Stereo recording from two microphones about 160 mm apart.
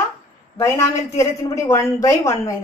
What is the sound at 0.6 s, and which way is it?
A woman's voice, 15° left (ahead or behind).